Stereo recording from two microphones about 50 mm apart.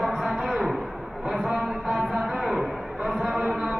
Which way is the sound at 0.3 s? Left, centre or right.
Centre.